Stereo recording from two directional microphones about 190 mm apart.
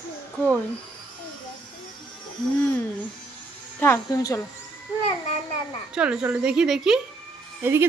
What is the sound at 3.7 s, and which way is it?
Speech, 10° left (ahead or behind).